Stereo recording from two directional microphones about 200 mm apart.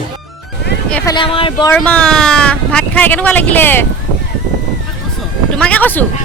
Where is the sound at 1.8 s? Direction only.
5° left (ahead or behind).